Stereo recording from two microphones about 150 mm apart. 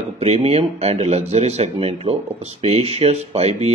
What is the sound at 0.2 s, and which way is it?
Speech, 45° right (ahead or behind).